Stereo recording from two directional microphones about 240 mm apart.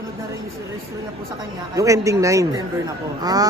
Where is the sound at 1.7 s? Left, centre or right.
Centre.